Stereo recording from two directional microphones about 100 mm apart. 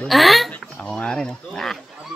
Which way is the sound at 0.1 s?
Centre (ahead or behind).